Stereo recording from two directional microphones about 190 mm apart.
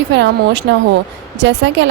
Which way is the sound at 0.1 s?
65° right (ahead or behind).